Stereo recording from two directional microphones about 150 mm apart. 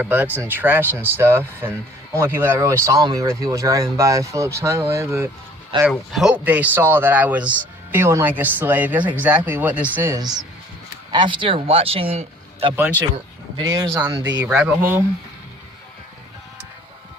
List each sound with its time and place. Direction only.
0.0 s speech: 10° right (ahead or behind)
5.9 s speech: centre (ahead or behind)
10.2 s speech: 25° right (ahead or behind)
12.7 s speech: 10° right (ahead or behind)
13.6 s speech: 25° right (ahead or behind)
14.0 s speech: 15° right (ahead or behind)